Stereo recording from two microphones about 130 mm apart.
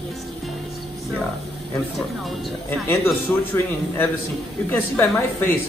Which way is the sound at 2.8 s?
20° left (ahead or behind).